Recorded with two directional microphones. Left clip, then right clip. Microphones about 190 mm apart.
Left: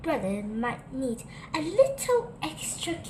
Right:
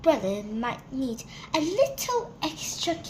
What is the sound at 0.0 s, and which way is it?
A woman's voice, 40° right (ahead or behind).